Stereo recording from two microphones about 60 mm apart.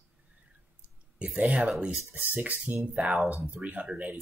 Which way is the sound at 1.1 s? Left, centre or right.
Right.